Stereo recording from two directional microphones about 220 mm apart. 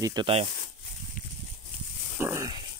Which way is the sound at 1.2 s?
40° left (ahead or behind).